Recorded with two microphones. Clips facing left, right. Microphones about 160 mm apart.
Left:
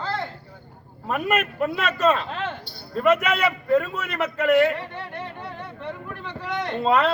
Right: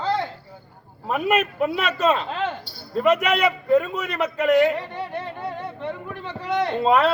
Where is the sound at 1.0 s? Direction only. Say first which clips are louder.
Right 2 dB; centre (ahead or behind).